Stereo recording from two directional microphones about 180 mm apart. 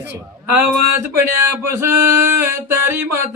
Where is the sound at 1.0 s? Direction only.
10° right (ahead or behind).